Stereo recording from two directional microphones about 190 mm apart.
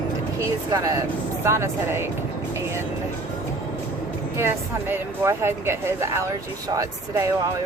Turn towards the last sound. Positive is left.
turn(degrees=-15)  # may be behind; listen again after turning